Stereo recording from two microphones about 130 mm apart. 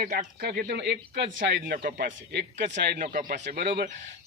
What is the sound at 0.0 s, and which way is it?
Speech, 90° right.